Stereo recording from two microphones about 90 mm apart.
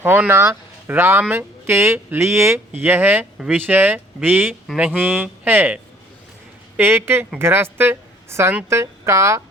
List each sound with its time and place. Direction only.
0.0 s speech: 25° right (ahead or behind)